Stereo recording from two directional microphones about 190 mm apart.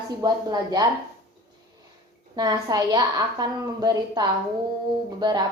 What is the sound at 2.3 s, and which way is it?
A woman's voice, 20° right (ahead or behind).